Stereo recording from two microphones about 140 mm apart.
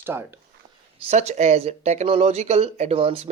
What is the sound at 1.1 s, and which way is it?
Speech, 50° right (ahead or behind).